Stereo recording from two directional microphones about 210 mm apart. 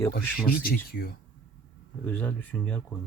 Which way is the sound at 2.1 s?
5° left (ahead or behind).